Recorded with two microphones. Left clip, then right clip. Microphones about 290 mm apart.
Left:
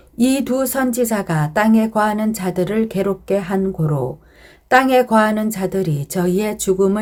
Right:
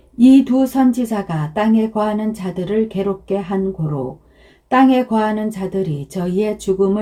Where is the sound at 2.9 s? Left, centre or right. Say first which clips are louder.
Left 1 dB; left.